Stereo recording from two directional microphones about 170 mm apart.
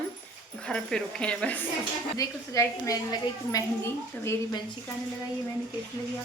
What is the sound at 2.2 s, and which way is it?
Speech, 20° left (ahead or behind).